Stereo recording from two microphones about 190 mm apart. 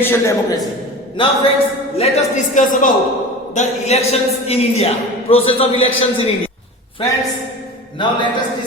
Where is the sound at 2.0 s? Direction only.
35° left (ahead or behind).